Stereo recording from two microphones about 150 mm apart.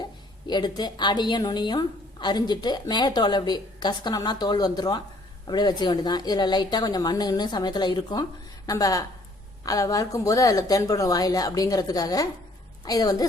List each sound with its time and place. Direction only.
0.4 s a woman's voice: 30° left (ahead or behind)